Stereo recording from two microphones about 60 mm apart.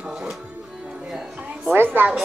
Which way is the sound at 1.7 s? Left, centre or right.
Right.